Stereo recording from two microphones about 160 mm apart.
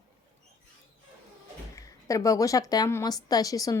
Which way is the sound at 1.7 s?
20° left (ahead or behind).